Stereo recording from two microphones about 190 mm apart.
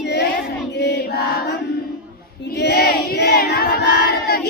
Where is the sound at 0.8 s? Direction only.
60° left (ahead or behind).